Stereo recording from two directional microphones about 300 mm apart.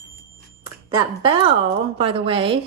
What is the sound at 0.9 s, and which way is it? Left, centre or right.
Speech, centre.